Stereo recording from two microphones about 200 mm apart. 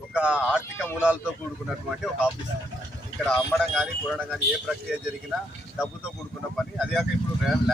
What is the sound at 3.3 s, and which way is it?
Speech, centre (ahead or behind).